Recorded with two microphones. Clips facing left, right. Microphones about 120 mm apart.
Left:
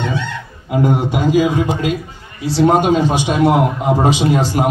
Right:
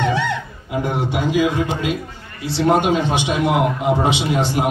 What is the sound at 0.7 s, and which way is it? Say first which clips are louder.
Speech: left 6 dB; 45° left (ahead or behind).